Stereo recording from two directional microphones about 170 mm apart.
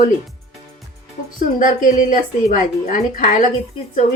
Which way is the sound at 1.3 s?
55° left (ahead or behind).